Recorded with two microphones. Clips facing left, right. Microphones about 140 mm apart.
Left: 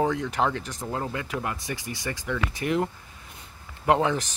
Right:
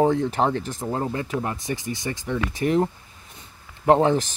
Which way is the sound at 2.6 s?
35° right (ahead or behind).